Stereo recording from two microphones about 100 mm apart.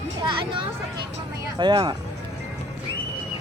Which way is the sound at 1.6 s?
50° right (ahead or behind).